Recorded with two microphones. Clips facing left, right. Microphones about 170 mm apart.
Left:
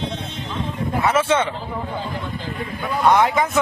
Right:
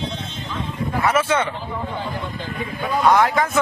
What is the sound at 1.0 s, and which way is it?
Speech, 25° left (ahead or behind).